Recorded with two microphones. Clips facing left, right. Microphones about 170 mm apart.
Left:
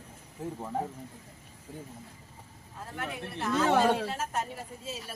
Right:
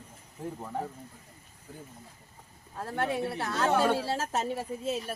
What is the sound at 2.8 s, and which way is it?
A woman's voice, 65° right (ahead or behind).